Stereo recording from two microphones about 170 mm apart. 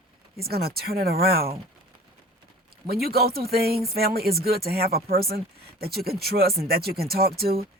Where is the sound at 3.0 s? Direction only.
65° right (ahead or behind).